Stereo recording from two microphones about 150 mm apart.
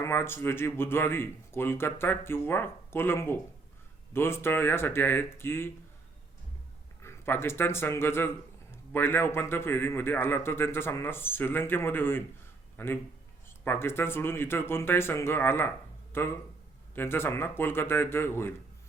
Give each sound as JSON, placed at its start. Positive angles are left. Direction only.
{"t": 0.0, "sound": "speech", "side_deg": 15}
{"t": 7.0, "sound": "a man's voice", "side_deg": 15}